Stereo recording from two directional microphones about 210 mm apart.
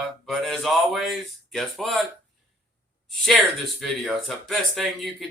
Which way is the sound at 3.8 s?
Centre (ahead or behind).